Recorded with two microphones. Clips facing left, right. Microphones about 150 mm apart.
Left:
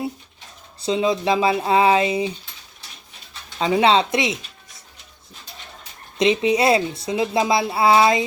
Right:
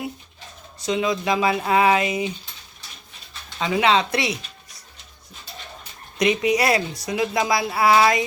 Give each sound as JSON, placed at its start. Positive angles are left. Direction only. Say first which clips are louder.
{"t": 0.8, "sound": "speech", "louder": "left 3 dB", "side_deg": 30}
{"t": 3.6, "sound": "speech", "louder": "left 3 dB", "side_deg": 30}
{"t": 6.1, "sound": "speech", "louder": "left 2 dB", "side_deg": 25}